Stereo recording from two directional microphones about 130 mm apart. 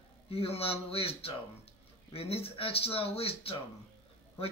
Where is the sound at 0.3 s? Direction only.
50° left (ahead or behind).